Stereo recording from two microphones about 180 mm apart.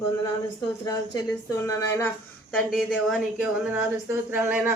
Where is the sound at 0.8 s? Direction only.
20° left (ahead or behind).